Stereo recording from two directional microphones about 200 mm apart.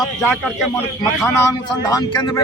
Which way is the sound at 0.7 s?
15° left (ahead or behind).